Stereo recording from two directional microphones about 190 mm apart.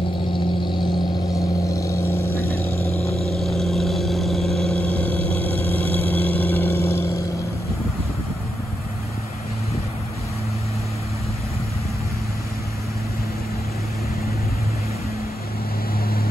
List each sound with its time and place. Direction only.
0.3 s vehicle: 25° left (ahead or behind)
3.0 s vehicle: 35° left (ahead or behind)
3.3 s vehicle: centre (ahead or behind)